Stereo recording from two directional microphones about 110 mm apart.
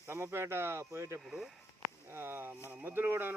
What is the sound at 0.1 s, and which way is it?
Speech, 25° right (ahead or behind).